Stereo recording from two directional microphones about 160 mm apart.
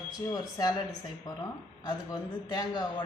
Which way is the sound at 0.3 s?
20° left (ahead or behind).